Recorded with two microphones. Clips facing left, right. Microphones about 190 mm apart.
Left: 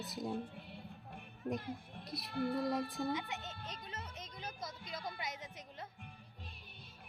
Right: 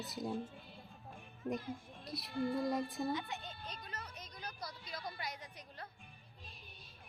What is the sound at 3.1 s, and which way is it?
Music, 20° left (ahead or behind).